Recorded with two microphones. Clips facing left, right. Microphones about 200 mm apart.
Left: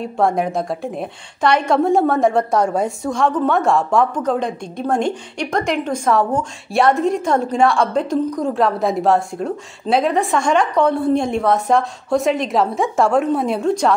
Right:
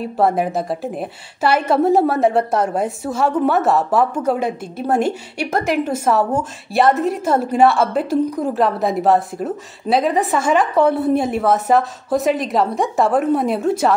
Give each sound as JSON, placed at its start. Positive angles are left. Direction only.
{"t": 0.0, "sound": "a woman's voice", "side_deg": -5}